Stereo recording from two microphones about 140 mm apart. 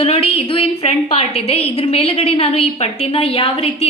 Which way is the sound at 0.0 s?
45° left (ahead or behind).